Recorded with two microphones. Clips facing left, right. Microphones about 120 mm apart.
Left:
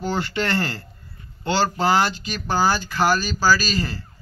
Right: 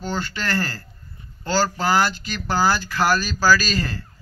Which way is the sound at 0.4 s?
25° left (ahead or behind).